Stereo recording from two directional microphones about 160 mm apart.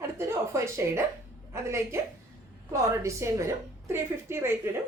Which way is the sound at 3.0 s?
20° right (ahead or behind).